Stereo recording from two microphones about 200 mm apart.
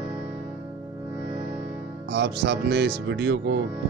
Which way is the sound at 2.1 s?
60° right (ahead or behind).